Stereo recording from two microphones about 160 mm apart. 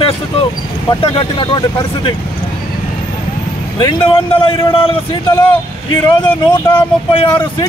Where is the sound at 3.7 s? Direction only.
30° left (ahead or behind).